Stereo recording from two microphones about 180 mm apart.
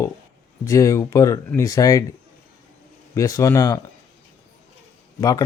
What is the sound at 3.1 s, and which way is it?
Speech, 20° left (ahead or behind).